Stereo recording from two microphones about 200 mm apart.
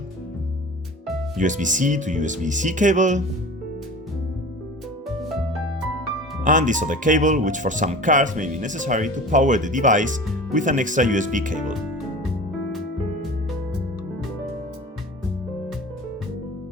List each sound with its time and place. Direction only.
1.4 s speech: 40° right (ahead or behind)
6.4 s speech: 40° right (ahead or behind)